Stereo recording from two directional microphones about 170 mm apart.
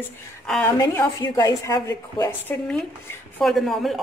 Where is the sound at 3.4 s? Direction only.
Centre (ahead or behind).